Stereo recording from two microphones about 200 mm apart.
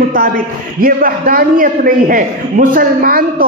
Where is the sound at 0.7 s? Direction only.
45° right (ahead or behind).